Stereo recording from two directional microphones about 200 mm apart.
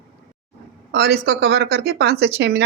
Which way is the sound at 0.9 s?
55° right (ahead or behind).